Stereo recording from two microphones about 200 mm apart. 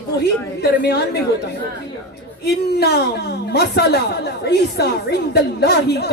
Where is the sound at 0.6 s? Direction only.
55° left (ahead or behind).